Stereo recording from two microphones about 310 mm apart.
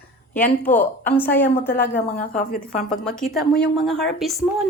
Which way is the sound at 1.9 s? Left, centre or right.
Left.